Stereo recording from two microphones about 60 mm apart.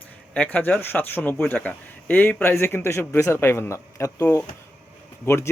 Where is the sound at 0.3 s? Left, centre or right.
Left.